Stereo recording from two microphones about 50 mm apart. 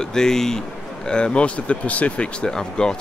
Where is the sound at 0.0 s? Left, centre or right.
Centre; by 2.2 s left.